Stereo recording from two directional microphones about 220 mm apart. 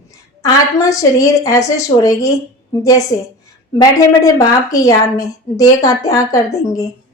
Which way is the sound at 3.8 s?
15° left (ahead or behind).